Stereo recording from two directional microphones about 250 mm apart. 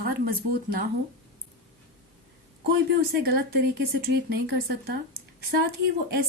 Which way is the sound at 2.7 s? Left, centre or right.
Right.